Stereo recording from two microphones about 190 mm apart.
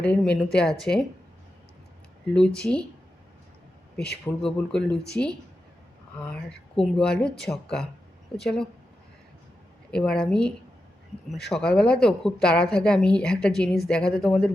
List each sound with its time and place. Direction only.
0.0 s a woman's voice: 5° left (ahead or behind)
2.3 s a woman's voice: 5° left (ahead or behind)
3.9 s speech: 60° left (ahead or behind)
4.4 s a woman's voice: 5° left (ahead or behind)
9.9 s a woman's voice: 5° left (ahead or behind)